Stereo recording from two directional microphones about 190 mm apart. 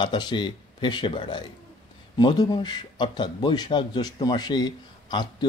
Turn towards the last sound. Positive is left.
turn(degrees=25)  # may be behind; listen again after turning